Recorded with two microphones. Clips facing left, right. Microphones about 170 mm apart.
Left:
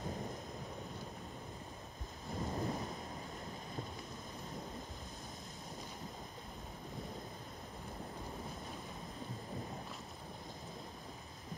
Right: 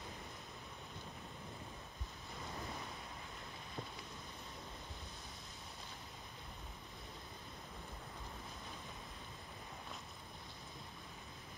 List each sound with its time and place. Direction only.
2.3 s thunder: 40° left (ahead or behind)